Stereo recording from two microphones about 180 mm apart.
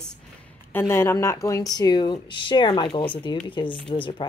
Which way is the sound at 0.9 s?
15° left (ahead or behind).